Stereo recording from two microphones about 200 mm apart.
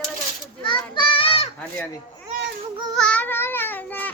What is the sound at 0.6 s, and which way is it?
Children playing, 25° left (ahead or behind).